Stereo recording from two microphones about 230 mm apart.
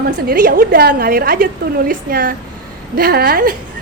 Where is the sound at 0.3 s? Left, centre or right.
Right.